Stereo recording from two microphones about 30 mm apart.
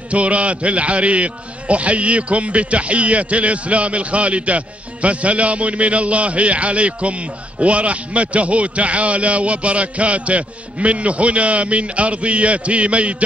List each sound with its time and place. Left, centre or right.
0.1 s a man's voice: right